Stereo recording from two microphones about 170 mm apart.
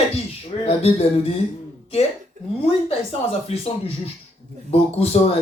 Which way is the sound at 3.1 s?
35° left (ahead or behind).